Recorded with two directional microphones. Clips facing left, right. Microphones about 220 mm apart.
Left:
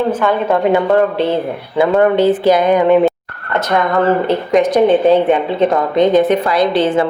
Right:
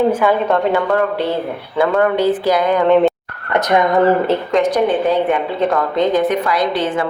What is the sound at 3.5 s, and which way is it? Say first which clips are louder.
Speech: right 1 dB; 15° right (ahead or behind).